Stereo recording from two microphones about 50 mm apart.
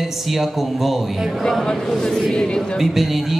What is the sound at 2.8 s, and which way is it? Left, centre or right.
Music, centre.